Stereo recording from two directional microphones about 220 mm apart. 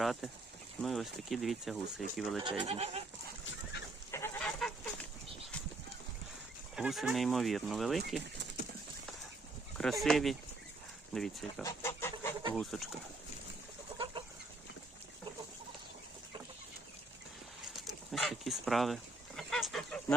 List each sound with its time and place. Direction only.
0.0 s speech: centre (ahead or behind)
2.4 s speech: 25° right (ahead or behind)
4.1 s chicken: 10° left (ahead or behind)
6.7 s speech: centre (ahead or behind)
10.0 s speech: centre (ahead or behind)
11.6 s chicken: 15° left (ahead or behind)
12.5 s speech: centre (ahead or behind)
14.0 s chicken: 20° right (ahead or behind)
18.1 s a sound: centre (ahead or behind)
19.4 s duck: centre (ahead or behind)